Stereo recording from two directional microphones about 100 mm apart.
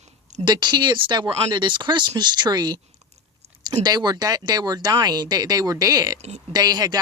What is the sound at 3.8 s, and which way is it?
Speech, 45° right (ahead or behind).